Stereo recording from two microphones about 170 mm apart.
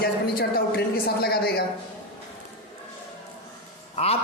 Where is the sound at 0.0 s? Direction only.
65° left (ahead or behind).